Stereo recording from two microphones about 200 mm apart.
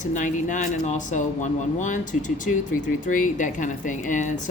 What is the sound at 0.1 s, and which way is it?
A woman's voice, 40° left (ahead or behind).